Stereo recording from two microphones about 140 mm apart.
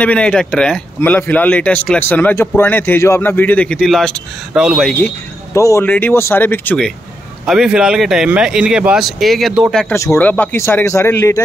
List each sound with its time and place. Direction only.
0.0 s a man's voice: 10° left (ahead or behind)
5.6 s speech: 20° left (ahead or behind)
7.4 s speech: 5° right (ahead or behind)
9.9 s speech: 20° left (ahead or behind)